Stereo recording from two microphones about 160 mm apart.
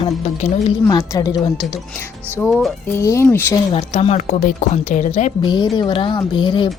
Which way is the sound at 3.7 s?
40° left (ahead or behind).